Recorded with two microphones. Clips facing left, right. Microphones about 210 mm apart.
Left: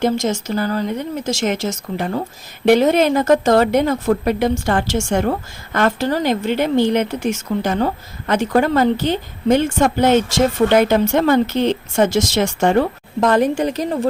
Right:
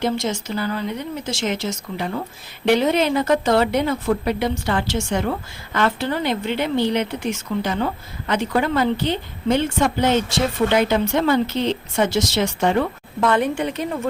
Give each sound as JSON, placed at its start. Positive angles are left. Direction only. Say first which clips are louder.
{"t": 0.0, "sound": "speech", "louder": "left 4 dB", "side_deg": 45}